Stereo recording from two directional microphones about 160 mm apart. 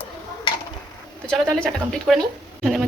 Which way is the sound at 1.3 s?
5° left (ahead or behind).